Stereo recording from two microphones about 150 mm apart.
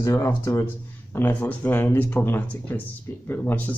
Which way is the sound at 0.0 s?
20° left (ahead or behind).